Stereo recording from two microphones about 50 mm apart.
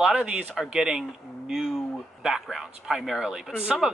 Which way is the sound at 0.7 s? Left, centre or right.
Centre.